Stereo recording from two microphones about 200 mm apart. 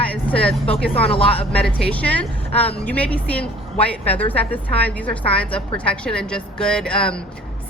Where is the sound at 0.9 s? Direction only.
30° left (ahead or behind).